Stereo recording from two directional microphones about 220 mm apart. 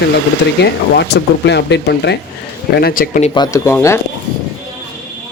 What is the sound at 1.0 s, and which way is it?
A man's voice, 50° left (ahead or behind).